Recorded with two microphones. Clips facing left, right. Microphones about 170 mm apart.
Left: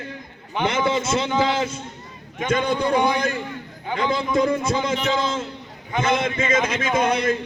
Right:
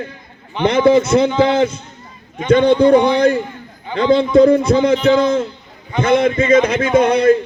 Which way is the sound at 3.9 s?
30° right (ahead or behind).